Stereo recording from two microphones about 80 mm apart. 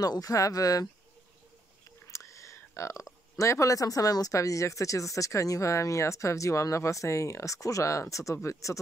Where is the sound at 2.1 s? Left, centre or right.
Left.